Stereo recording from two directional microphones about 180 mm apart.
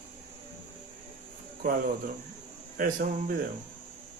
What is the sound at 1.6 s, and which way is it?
Speech, 50° right (ahead or behind).